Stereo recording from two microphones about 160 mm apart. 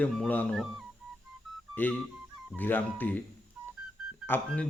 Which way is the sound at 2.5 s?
10° left (ahead or behind).